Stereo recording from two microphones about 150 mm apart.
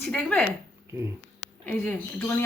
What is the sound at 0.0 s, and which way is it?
Speech, 5° left (ahead or behind).